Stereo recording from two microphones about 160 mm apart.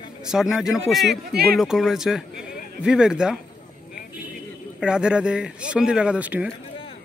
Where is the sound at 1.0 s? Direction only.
80° right.